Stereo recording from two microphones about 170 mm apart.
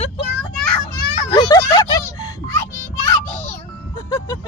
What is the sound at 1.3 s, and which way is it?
A child's voice, 25° left (ahead or behind).